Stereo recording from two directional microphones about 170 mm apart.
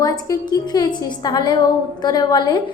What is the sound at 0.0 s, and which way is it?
A woman's voice, 20° left (ahead or behind).